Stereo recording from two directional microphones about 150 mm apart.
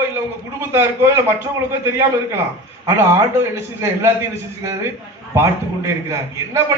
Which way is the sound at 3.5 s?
20° right (ahead or behind).